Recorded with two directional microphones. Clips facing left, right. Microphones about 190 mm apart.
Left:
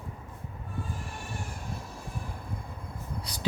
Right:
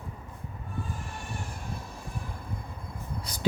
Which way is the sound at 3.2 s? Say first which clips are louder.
Even; 50° right (ahead or behind).